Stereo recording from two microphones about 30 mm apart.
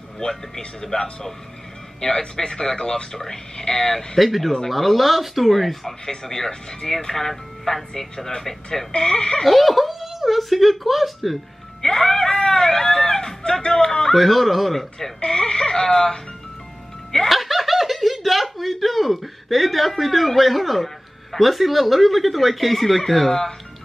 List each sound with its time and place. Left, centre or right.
0.2 s speech: left
0.9 s speech: left
2.0 s speech: centre
4.2 s speech: centre
5.5 s speech: centre; by 7.2 s left
7.2 s speech: centre
8.9 s speech: left
9.4 s speech: centre
11.8 s music: centre
13.7 s speech: centre
14.1 s speech: centre
15.2 s speech: left
17.3 s speech: centre